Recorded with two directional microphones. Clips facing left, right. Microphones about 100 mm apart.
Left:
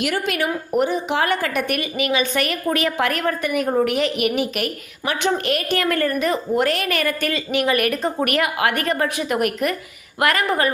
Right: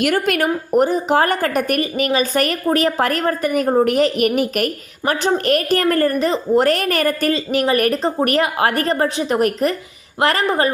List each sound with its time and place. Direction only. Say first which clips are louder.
0.0 s a woman's voice: right 5 dB; 50° right (ahead or behind); by 6.7 s 30° right (ahead or behind)
6.7 s a woman's voice: right 4 dB; 40° right (ahead or behind)
10.4 s speech: right 3 dB; 20° right (ahead or behind)